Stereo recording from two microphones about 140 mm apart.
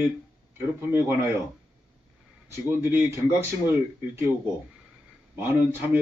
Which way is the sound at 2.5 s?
15° right (ahead or behind).